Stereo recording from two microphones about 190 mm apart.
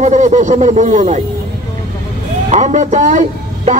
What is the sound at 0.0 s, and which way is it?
Speech, 40° right (ahead or behind).